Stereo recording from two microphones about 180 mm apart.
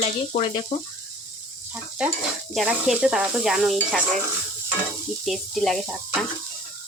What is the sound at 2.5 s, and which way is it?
Speech, centre (ahead or behind).